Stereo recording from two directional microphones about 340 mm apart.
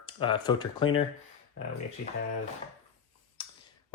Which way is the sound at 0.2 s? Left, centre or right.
Centre.